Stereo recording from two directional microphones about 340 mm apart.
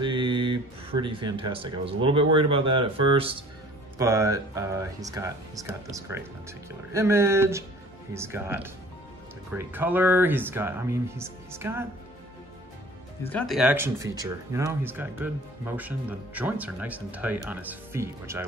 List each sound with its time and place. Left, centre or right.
0.0 s speech: centre
13.3 s speech: centre